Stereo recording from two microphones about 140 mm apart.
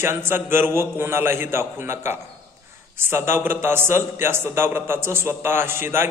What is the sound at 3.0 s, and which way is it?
A man's voice, 15° right (ahead or behind).